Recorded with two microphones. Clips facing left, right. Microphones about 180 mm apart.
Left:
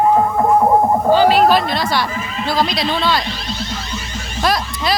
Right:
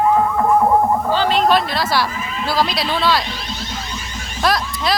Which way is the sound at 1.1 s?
10° left (ahead or behind).